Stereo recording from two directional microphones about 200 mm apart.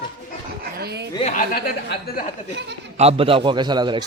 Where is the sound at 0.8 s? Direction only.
55° right (ahead or behind).